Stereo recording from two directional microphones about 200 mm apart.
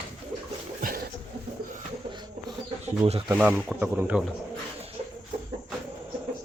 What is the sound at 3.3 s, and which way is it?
Speech, 10° right (ahead or behind).